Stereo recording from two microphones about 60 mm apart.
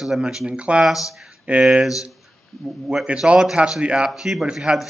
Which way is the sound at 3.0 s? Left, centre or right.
Centre.